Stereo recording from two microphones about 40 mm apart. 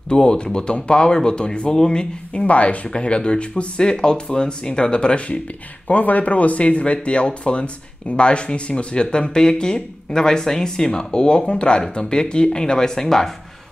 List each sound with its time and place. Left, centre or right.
0.1 s speech: left
2.4 s speech: left
5.9 s speech: left; by 13.3 s centre